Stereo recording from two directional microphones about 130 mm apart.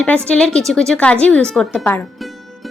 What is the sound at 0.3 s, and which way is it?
Speech, 5° left (ahead or behind).